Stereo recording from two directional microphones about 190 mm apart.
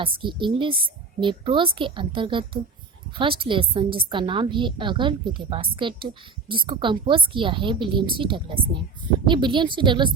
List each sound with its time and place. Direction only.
0.0 s a woman's voice: 25° right (ahead or behind)